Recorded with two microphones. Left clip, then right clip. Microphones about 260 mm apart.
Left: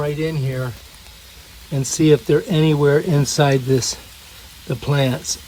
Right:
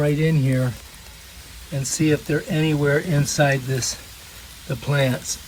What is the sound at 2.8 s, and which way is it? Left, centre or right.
Speech, centre.